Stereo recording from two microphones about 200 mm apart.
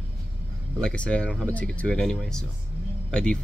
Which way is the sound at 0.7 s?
5° left (ahead or behind).